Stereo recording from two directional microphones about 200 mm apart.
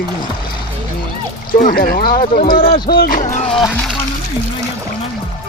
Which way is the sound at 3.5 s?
Centre (ahead or behind).